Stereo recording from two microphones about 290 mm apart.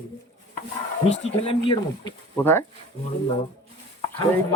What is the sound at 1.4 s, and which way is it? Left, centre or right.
Speech, centre.